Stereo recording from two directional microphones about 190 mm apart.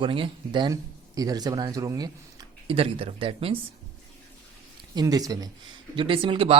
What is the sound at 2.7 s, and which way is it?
Speech, 30° right (ahead or behind).